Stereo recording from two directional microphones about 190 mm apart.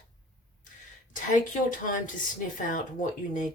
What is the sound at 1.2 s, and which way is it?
Speech, 40° left (ahead or behind).